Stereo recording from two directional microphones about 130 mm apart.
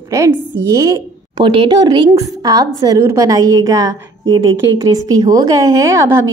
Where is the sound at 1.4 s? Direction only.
40° right (ahead or behind).